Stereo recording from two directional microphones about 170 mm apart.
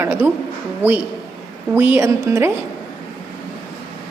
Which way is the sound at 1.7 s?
10° right (ahead or behind).